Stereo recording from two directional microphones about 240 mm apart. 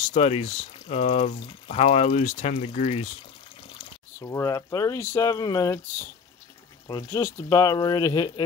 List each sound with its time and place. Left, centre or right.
0.1 s speech: left
3.7 s speech: centre